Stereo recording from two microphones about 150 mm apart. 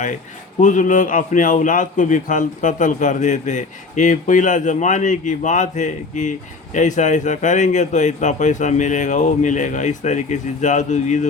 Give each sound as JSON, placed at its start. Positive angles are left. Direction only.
{"t": 0.6, "sound": "a man's voice", "side_deg": 55}